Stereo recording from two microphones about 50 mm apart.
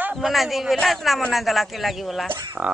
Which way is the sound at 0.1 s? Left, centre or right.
Centre.